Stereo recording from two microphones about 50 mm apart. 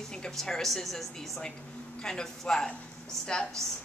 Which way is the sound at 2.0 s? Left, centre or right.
Centre.